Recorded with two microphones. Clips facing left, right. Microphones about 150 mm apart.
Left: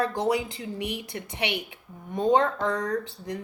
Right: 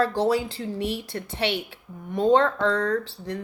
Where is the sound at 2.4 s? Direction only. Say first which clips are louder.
Right 4 dB; 70° right (ahead or behind).